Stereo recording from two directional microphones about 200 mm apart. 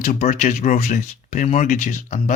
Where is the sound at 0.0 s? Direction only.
40° left (ahead or behind).